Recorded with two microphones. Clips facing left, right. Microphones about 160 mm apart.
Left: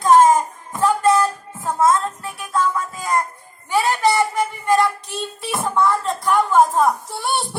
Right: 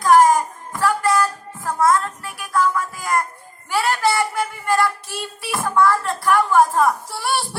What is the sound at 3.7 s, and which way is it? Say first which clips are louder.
Child singing: left 2 dB; 20° left (ahead or behind).